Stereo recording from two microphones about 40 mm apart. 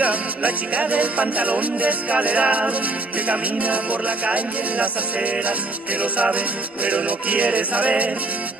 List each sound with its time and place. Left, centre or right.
0.0 s music: right
6.3 s music: right